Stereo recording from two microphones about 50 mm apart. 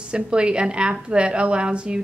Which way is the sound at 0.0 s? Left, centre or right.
Right.